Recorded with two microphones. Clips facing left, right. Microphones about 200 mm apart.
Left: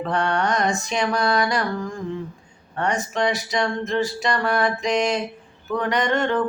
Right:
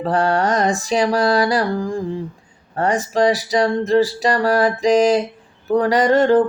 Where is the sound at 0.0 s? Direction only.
35° right (ahead or behind).